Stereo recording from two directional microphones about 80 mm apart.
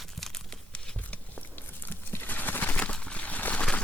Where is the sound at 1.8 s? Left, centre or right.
Left.